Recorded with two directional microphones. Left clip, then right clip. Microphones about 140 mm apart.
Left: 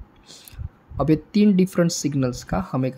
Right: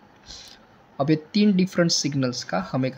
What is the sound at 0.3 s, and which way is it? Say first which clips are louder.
Speech: right 3 dB; 40° left (ahead or behind).